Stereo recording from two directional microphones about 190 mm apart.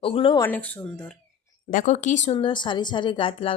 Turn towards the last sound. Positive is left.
turn(degrees=30)  # may be behind; listen again after turning